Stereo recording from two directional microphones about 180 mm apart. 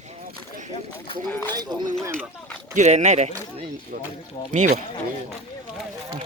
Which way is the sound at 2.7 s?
40° right (ahead or behind).